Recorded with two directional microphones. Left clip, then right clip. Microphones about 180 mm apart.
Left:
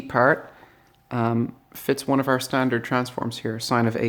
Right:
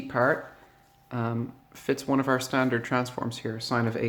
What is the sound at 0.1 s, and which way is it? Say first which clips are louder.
Speech: left 6 dB; 40° left (ahead or behind).